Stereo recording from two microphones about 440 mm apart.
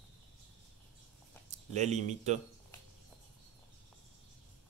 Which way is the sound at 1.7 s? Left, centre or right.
Centre.